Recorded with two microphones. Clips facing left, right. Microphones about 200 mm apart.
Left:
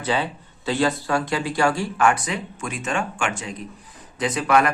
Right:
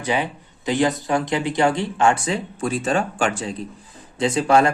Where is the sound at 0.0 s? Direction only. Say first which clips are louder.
Right 1 dB; 15° right (ahead or behind).